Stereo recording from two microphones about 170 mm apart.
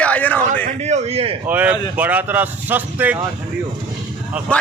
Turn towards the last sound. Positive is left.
turn(degrees=5)  # may be behind; listen again after turning